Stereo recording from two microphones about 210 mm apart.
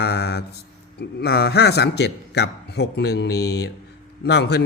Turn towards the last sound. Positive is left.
turn(degrees=55)  # may be behind; listen again after turning